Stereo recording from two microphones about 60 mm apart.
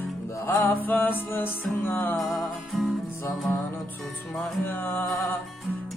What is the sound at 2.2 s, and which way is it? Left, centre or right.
Music, centre.